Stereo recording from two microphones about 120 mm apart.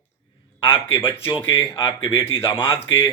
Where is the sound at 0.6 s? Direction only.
45° left (ahead or behind).